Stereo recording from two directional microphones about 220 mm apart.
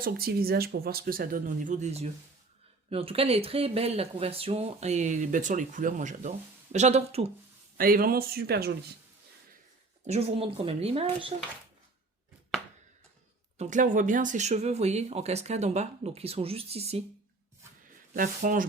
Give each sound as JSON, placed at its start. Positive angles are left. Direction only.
{"t": 0.0, "sound": "speech", "side_deg": -45}
{"t": 7.8, "sound": "speech", "side_deg": -40}
{"t": 10.0, "sound": "speech", "side_deg": -30}
{"t": 13.6, "sound": "speech", "side_deg": -35}
{"t": 18.1, "sound": "speech", "side_deg": -40}